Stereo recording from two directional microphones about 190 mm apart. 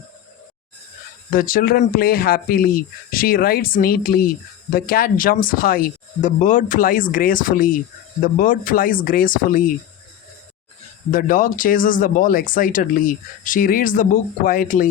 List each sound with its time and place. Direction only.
1.3 s speech: 50° left (ahead or behind)
11.1 s speech: 45° left (ahead or behind)